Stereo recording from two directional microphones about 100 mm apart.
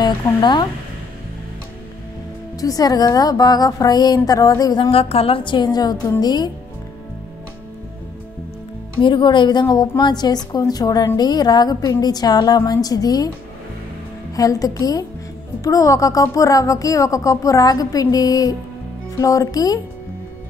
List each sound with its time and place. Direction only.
0.0 s a woman's voice: 50° left (ahead or behind)
2.6 s speech: 40° left (ahead or behind)
4.9 s a woman's voice: 70° left (ahead or behind); by 6.5 s 45° left (ahead or behind)
9.0 s a woman's voice: 50° left (ahead or behind)
14.3 s speech: 35° left (ahead or behind)